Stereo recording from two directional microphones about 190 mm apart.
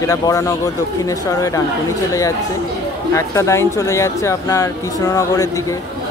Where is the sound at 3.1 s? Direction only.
15° left (ahead or behind).